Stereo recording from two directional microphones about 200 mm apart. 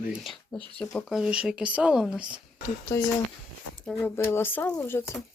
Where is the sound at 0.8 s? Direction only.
5° left (ahead or behind).